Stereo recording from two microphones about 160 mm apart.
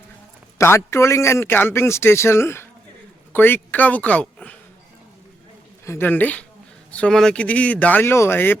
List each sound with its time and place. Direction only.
0.6 s a man's voice: 15° left (ahead or behind)
5.8 s a man's voice: 15° left (ahead or behind)